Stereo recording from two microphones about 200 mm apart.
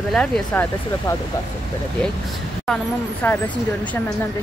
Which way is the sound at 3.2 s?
10° left (ahead or behind).